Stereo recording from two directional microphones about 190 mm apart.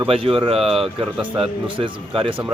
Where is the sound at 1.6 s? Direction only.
25° right (ahead or behind).